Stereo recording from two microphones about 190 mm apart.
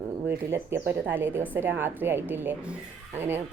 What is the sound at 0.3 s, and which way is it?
Speech, 10° right (ahead or behind).